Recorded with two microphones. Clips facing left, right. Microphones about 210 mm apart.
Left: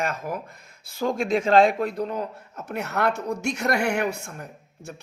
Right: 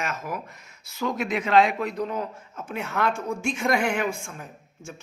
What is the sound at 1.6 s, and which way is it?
A woman's voice, 50° left (ahead or behind).